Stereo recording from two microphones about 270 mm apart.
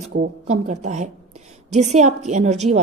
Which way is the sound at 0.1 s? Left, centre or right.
Right.